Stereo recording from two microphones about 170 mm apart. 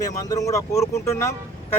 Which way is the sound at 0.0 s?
20° left (ahead or behind).